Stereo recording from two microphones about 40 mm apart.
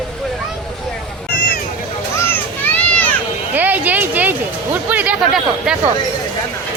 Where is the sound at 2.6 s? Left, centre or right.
Left.